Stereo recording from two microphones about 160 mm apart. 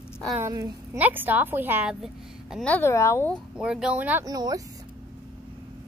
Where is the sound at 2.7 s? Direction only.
15° left (ahead or behind).